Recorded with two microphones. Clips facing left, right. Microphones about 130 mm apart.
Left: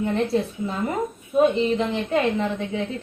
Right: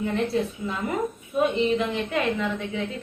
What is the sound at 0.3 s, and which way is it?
A woman's voice, 35° left (ahead or behind).